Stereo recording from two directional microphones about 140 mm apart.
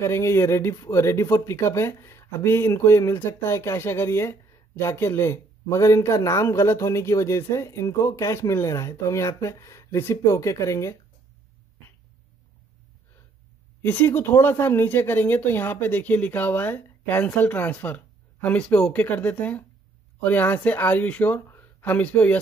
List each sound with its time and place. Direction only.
0.0 s speech: 20° left (ahead or behind)
13.8 s speech: 15° left (ahead or behind)